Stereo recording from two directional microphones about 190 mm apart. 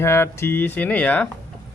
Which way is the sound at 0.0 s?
15° left (ahead or behind).